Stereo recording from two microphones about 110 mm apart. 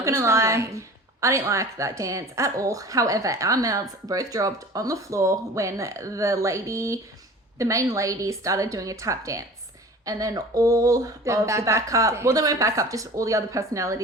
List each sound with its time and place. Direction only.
0.0 s a woman's voice: 25° right (ahead or behind)